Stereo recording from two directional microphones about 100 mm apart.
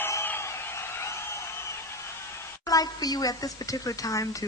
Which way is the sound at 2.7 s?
40° left (ahead or behind).